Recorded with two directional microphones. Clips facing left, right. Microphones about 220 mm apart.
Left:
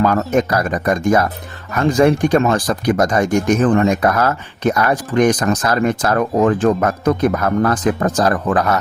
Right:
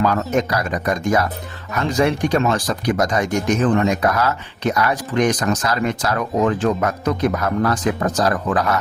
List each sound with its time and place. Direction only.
0.0 s speech: 50° left (ahead or behind)